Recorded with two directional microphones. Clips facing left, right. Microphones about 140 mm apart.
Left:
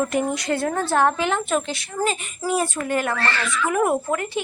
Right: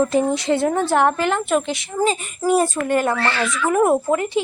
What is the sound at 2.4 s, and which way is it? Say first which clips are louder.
Speech: right 5 dB; 45° right (ahead or behind).